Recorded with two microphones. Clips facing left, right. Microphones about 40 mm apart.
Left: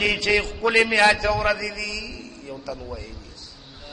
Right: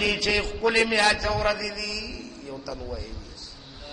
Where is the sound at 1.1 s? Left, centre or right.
Centre.